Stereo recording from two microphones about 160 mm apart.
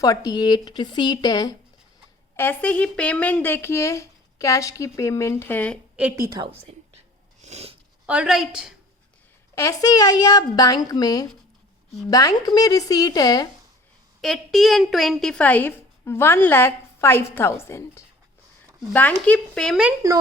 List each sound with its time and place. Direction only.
0.0 s a woman's voice: 20° left (ahead or behind)
2.3 s a woman's voice: 15° left (ahead or behind)
6.0 s a woman's voice: 10° right (ahead or behind)
6.2 s a woman's voice: 25° right (ahead or behind)
7.4 s a sound: 40° right (ahead or behind)
8.0 s a woman's voice: 5° right (ahead or behind)
9.6 s a woman's voice: 20° left (ahead or behind)
14.2 s a woman's voice: centre (ahead or behind)